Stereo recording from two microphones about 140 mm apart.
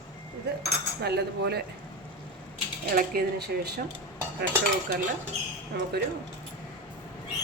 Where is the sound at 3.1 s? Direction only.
90° right.